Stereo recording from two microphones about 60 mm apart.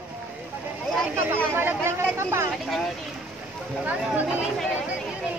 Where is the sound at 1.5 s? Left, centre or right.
Right.